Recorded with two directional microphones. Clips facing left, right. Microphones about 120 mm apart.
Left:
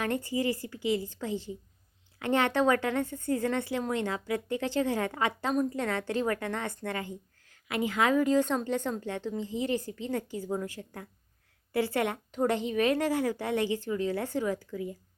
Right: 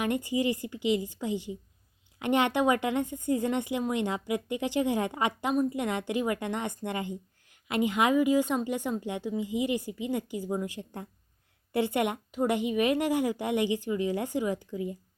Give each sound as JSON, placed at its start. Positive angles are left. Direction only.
{"t": 0.0, "sound": "a woman's voice", "side_deg": -15}